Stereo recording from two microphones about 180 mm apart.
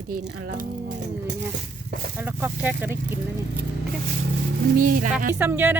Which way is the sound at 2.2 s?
10° right (ahead or behind).